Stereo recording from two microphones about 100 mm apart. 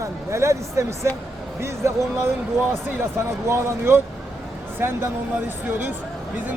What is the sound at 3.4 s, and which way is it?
A man's voice, 25° right (ahead or behind).